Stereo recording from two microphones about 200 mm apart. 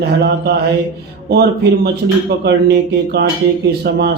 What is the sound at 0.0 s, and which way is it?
A man's voice, 55° right (ahead or behind).